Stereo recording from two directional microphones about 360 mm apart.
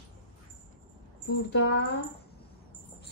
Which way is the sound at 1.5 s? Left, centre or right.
Left.